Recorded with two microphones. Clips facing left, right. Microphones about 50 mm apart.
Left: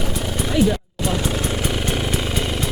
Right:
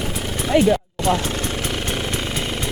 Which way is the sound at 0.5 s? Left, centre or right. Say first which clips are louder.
Right 2 dB; right.